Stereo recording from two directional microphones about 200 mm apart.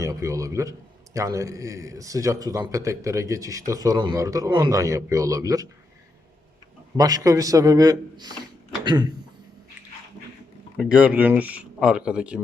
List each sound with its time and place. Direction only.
0.0 s a man's voice: 15° right (ahead or behind)
6.9 s a man's voice: 20° right (ahead or behind)
10.8 s speech: 5° right (ahead or behind)